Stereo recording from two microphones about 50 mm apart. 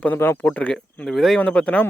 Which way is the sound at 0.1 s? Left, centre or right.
Left.